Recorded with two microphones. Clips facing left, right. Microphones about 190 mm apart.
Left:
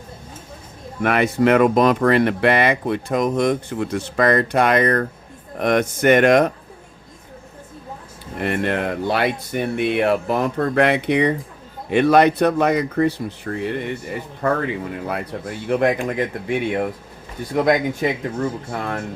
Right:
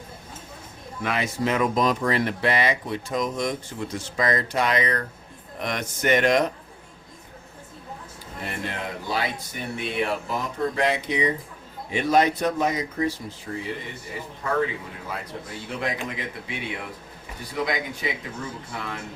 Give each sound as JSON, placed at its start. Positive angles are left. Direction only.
{"t": 1.0, "sound": "speech", "side_deg": 60}
{"t": 8.4, "sound": "speech", "side_deg": 65}